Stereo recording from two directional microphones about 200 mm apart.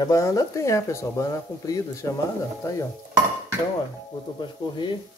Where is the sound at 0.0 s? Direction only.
15° left (ahead or behind).